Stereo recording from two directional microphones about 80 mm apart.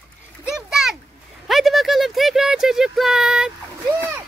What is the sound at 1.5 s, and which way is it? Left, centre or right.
Speech, centre.